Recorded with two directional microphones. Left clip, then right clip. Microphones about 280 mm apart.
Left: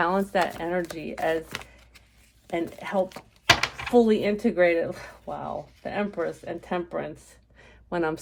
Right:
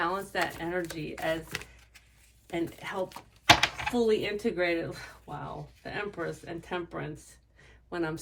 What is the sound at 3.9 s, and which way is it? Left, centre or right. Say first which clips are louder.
Speech: left 11 dB; left.